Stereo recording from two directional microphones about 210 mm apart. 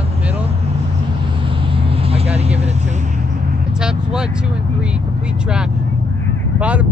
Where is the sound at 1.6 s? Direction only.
25° right (ahead or behind).